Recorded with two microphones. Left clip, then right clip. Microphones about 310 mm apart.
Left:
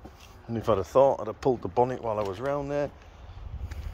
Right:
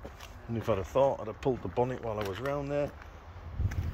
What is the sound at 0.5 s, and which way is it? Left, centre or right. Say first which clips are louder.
Speech: left 6 dB; centre.